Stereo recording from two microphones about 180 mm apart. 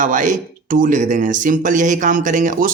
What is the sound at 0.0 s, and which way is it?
Speech, 45° right (ahead or behind).